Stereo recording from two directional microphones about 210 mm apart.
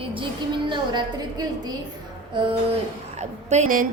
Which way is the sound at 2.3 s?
20° right (ahead or behind).